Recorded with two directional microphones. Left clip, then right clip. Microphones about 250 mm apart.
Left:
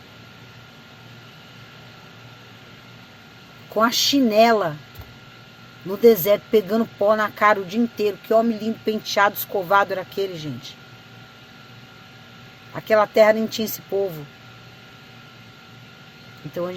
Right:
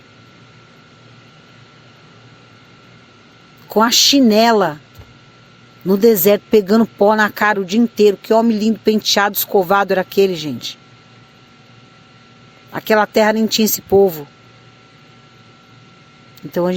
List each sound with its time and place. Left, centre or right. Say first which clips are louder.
3.8 s speech: right 7 dB; right
5.9 s speech: right 4 dB; right
12.7 s speech: right 3 dB; right